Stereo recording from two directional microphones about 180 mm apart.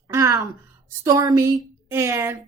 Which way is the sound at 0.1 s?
20° right (ahead or behind).